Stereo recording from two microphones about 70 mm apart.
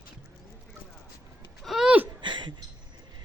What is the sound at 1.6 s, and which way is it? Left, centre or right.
Gasp, centre.